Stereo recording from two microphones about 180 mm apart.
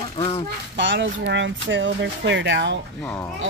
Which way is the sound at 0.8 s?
80° right.